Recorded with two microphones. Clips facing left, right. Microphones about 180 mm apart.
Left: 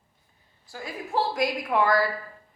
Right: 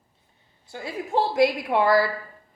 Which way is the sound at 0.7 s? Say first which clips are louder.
Right 3 dB; 30° right (ahead or behind).